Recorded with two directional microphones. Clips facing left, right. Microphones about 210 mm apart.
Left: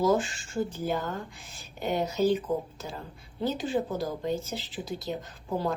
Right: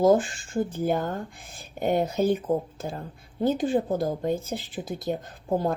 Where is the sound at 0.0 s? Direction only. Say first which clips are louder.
Right 5 dB; 50° right (ahead or behind).